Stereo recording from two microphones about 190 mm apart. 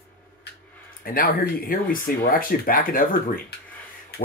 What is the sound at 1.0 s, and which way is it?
Speech, 50° left (ahead or behind).